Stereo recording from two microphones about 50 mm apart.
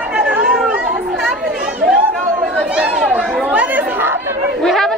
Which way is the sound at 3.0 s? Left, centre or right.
Right.